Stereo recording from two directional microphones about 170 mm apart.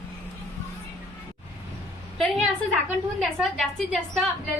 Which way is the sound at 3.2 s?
Centre (ahead or behind).